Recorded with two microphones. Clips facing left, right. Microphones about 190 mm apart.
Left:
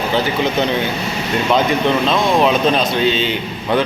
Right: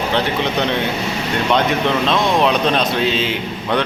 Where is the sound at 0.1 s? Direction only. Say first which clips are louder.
Left 2 dB; centre (ahead or behind).